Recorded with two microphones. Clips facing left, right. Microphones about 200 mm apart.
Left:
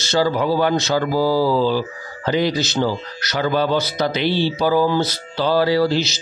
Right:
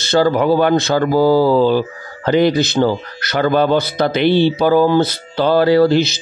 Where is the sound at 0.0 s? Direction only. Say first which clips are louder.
Right 5 dB; 55° right (ahead or behind).